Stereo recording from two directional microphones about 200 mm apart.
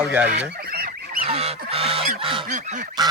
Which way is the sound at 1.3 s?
30° right (ahead or behind).